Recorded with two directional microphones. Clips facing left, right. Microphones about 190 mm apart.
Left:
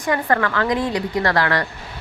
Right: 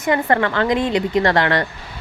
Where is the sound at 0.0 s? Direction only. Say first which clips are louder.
Right 2 dB; 25° right (ahead or behind).